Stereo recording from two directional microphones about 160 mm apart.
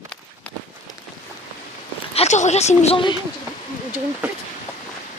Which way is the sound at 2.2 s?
45° left (ahead or behind).